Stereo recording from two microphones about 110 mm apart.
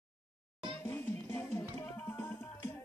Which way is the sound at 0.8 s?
20° left (ahead or behind).